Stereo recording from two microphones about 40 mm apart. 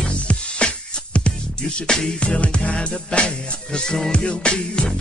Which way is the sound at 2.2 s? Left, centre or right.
Left.